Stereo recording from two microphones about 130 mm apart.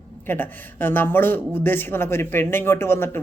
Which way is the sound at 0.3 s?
15° left (ahead or behind).